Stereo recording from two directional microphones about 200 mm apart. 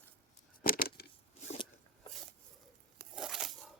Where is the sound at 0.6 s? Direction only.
45° left (ahead or behind).